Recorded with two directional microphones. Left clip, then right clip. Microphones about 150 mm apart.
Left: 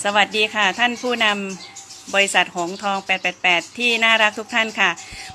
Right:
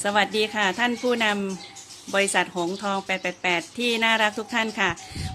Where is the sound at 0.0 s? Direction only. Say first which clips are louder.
Left 5 dB; 30° right (ahead or behind).